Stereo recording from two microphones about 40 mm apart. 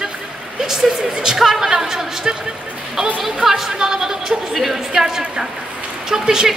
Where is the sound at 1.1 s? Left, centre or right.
Centre.